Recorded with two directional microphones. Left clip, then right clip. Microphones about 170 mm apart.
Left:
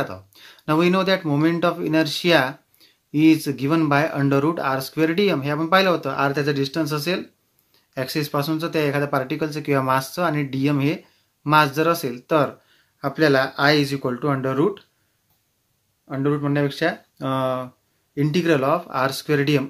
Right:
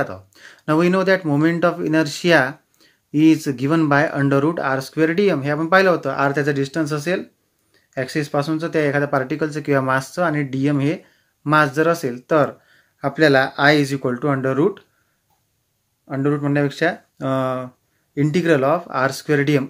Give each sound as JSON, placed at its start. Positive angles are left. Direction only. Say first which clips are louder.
{"t": 0.0, "sound": "speech", "louder": "right 3 dB", "side_deg": -20}
{"t": 16.1, "sound": "speech", "louder": "right 2 dB", "side_deg": -20}